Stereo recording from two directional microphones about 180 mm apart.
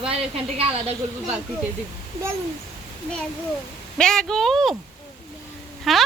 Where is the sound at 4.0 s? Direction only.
5° left (ahead or behind).